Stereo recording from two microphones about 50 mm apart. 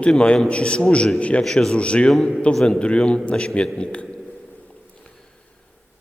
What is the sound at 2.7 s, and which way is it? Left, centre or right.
Speech, left.